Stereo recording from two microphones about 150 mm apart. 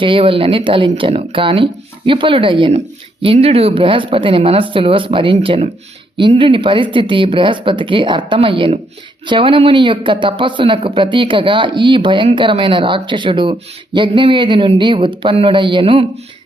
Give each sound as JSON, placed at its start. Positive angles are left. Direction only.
{"t": 0.0, "sound": "speech", "side_deg": -35}